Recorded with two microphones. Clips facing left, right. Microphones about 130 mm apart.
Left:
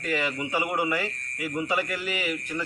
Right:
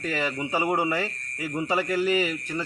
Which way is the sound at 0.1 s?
30° right (ahead or behind).